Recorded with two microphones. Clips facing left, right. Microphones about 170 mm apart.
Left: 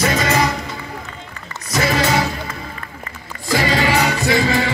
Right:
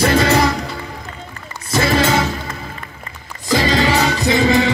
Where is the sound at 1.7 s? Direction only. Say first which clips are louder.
Right 2 dB; 30° right (ahead or behind).